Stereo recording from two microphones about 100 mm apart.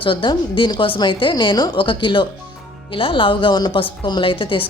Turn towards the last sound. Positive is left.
turn(degrees=60)  # may be behind; listen again after turning